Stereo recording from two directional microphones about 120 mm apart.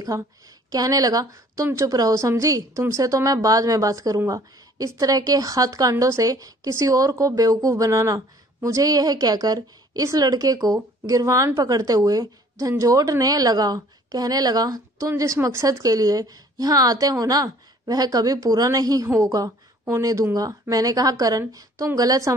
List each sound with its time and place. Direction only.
0.1 s a woman's voice: 25° right (ahead or behind)